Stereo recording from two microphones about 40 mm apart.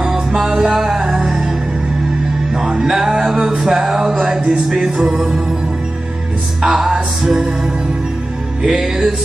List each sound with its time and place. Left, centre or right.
0.0 s music: centre
2.5 s music: centre
6.6 s music: centre
8.7 s music: centre